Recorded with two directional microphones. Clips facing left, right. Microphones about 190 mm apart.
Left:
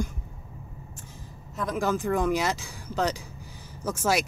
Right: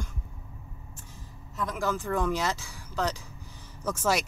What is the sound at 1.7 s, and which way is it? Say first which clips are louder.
Speech: left 4 dB; 20° left (ahead or behind).